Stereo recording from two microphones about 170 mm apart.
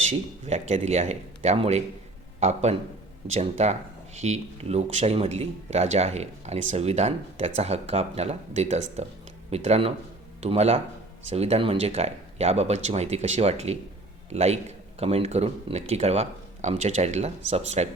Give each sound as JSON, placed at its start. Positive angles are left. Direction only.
{"t": 0.0, "sound": "speech", "side_deg": -40}